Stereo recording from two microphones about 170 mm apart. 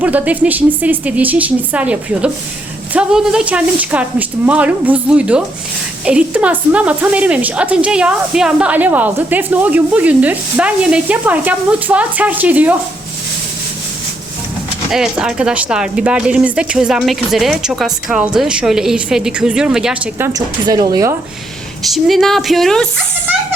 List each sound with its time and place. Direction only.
0.0 s a woman's voice: 10° right (ahead or behind)
14.9 s speech: 5° right (ahead or behind); by 21.2 s 20° right (ahead or behind)
21.8 s speech: centre (ahead or behind)